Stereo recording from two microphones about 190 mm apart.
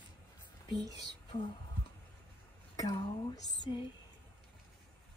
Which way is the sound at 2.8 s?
25° left (ahead or behind).